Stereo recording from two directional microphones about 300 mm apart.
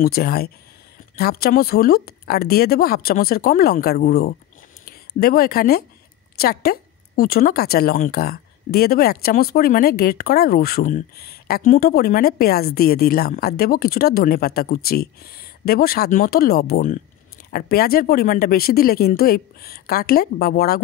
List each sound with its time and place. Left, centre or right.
0.0 s speech: left